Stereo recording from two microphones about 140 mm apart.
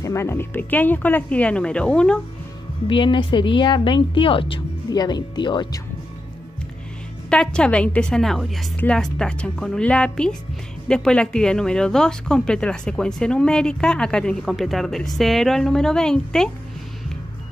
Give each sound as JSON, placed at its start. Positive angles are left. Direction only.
{"t": 0.0, "sound": "a woman's voice", "side_deg": 20}
{"t": 2.9, "sound": "speech", "side_deg": 35}
{"t": 7.2, "sound": "a woman's voice", "side_deg": 5}